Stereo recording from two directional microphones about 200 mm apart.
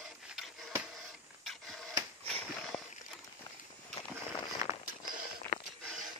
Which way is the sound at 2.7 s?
15° left (ahead or behind).